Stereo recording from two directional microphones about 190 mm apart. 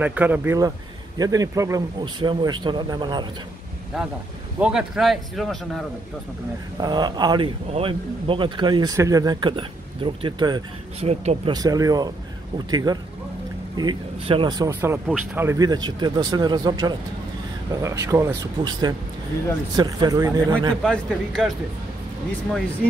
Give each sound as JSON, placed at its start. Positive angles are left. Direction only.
{"t": 0.0, "sound": "speech", "side_deg": -10}
{"t": 4.6, "sound": "a man's voice", "side_deg": -5}
{"t": 6.8, "sound": "speech", "side_deg": -20}
{"t": 11.5, "sound": "speech", "side_deg": -20}
{"t": 20.8, "sound": "a man's voice", "side_deg": 5}